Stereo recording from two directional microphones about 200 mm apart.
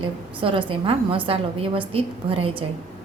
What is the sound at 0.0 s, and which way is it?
A woman's voice, 25° right (ahead or behind).